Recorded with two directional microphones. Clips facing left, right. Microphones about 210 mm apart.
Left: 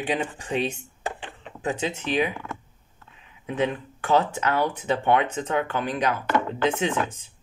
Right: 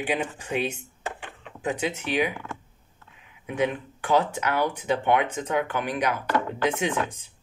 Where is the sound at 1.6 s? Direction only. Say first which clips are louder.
Left 1 dB; 15° right (ahead or behind).